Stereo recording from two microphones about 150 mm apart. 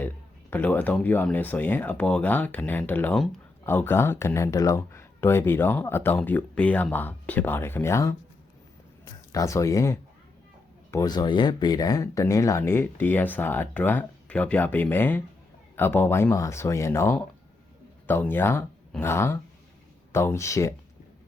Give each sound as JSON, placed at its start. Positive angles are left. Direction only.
{"t": 0.5, "sound": "speech", "side_deg": 10}